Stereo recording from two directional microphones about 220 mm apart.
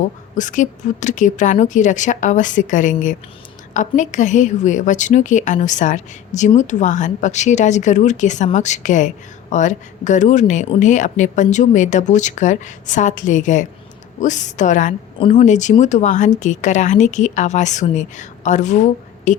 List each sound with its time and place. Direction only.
0.0 s a woman's voice: 35° left (ahead or behind)